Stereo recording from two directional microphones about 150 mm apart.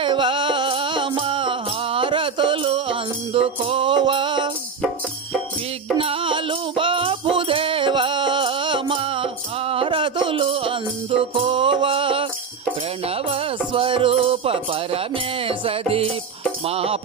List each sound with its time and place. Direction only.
0.0 s music: 35° right (ahead or behind)
6.0 s music: 35° right (ahead or behind)